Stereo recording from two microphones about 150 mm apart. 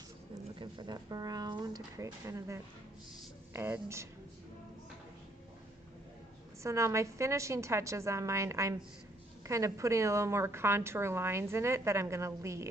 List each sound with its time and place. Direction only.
0.6 s a woman's voice: 30° right (ahead or behind)
6.6 s a woman's voice: 20° right (ahead or behind)